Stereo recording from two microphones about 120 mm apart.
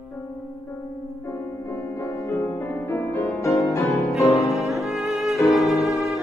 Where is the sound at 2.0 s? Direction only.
25° left (ahead or behind).